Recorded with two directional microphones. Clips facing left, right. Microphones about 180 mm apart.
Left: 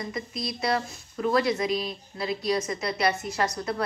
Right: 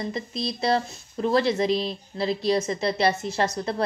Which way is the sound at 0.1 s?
30° right (ahead or behind).